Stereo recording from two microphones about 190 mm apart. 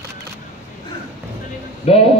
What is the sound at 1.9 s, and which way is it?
Speech, 30° left (ahead or behind).